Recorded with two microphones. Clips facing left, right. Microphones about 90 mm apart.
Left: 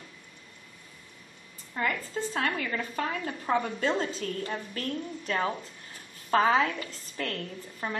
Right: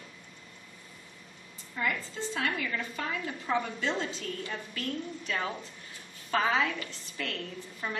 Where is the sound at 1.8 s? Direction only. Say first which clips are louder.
Left 3 dB; 45° left (ahead or behind).